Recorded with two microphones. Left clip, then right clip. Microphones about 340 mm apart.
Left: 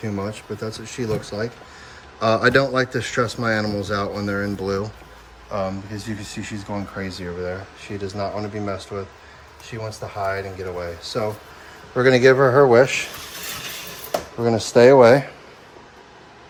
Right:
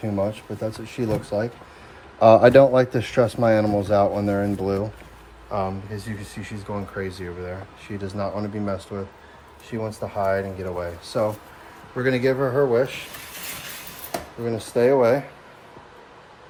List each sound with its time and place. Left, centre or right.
0.2 s speech: centre
11.9 s speech: centre
14.4 s speech: left